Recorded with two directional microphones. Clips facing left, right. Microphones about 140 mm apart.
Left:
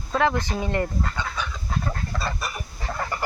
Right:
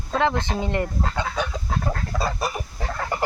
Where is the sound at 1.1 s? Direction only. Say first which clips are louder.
Right 5 dB; 50° right (ahead or behind).